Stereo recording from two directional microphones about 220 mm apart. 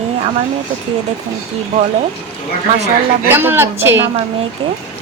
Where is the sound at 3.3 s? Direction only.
10° right (ahead or behind).